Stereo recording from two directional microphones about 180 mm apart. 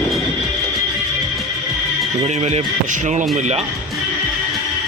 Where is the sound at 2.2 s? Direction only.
35° right (ahead or behind).